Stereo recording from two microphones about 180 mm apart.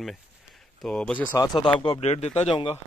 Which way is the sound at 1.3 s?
20° left (ahead or behind).